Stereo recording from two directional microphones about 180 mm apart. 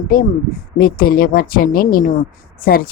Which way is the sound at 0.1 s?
50° left (ahead or behind).